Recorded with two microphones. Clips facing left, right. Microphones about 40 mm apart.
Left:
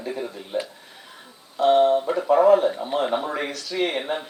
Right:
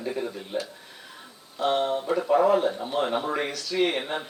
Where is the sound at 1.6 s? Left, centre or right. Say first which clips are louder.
Left 8 dB; centre.